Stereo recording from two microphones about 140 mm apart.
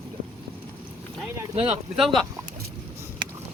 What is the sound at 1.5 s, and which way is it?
Speech, 40° right (ahead or behind).